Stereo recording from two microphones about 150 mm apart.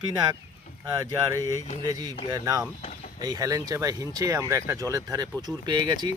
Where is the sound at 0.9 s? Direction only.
20° right (ahead or behind).